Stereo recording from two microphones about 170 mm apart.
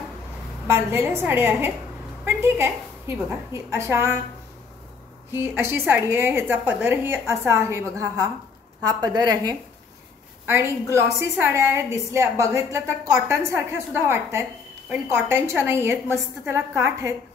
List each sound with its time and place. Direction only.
0.7 s a woman's voice: 15° right (ahead or behind)
5.6 s a woman's voice: 15° right (ahead or behind)